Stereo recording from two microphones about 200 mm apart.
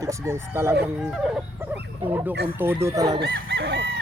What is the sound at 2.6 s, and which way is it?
Speech, 10° right (ahead or behind).